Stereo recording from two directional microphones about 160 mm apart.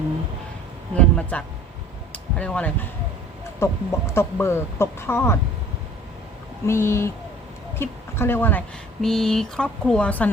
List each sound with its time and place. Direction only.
0.9 s speech: 10° left (ahead or behind)
2.1 s a sound: 10° left (ahead or behind)
3.6 s speech: 15° left (ahead or behind)
6.7 s speech: 15° left (ahead or behind)